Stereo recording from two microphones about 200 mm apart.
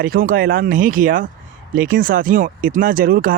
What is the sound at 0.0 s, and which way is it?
Speech, 45° right (ahead or behind).